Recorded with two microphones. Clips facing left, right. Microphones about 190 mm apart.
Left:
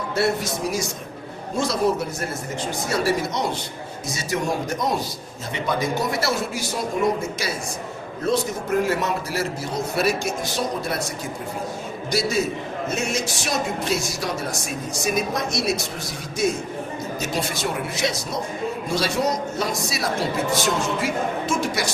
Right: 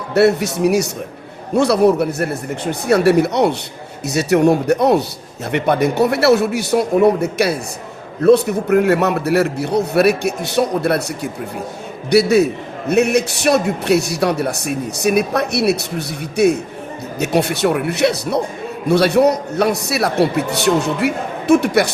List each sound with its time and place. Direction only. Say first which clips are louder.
0.1 s a man's voice: right 10 dB; 65° right (ahead or behind)